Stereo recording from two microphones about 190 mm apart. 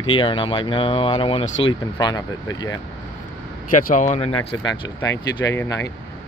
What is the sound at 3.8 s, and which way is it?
Speech, 40° left (ahead or behind).